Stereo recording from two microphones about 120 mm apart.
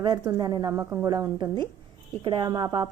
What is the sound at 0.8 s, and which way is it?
Speech, 15° right (ahead or behind).